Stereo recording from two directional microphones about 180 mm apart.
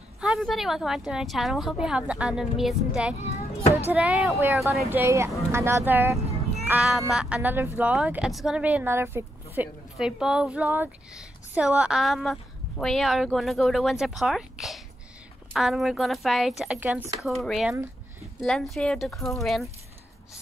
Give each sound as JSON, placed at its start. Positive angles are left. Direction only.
{"t": 0.2, "sound": "speech", "side_deg": -5}
{"t": 3.2, "sound": "a child's voice", "side_deg": 40}
{"t": 3.7, "sound": "speech", "side_deg": -10}
{"t": 4.8, "sound": "speech", "side_deg": -15}